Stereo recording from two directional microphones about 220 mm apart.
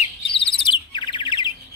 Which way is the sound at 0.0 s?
25° left (ahead or behind).